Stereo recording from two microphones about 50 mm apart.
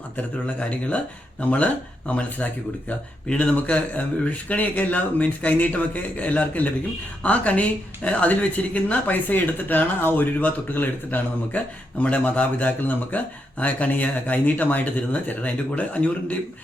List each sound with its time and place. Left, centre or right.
0.2 s speech: left